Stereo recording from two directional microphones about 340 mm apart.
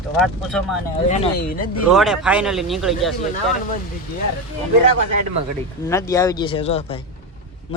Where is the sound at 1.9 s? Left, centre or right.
Centre.